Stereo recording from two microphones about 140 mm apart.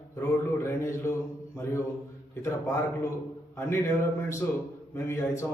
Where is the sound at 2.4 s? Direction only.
20° left (ahead or behind).